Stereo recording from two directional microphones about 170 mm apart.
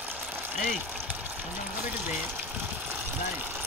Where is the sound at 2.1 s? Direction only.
10° right (ahead or behind).